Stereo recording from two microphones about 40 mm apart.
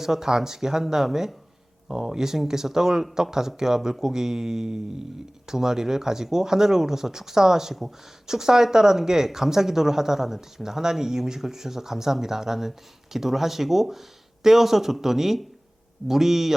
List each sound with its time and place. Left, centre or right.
0.0 s speech: centre